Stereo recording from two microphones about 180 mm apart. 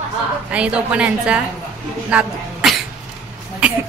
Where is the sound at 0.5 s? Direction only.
5° right (ahead or behind).